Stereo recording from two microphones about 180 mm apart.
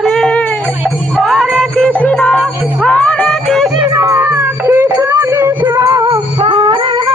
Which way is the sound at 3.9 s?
15° right (ahead or behind).